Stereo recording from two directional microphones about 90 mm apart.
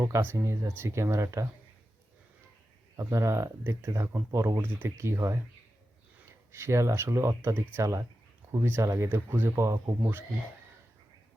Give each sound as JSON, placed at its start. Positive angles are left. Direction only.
{"t": 0.0, "sound": "speech", "side_deg": -30}
{"t": 3.0, "sound": "speech", "side_deg": -35}
{"t": 3.6, "sound": "speech", "side_deg": -25}
{"t": 6.5, "sound": "speech", "side_deg": -30}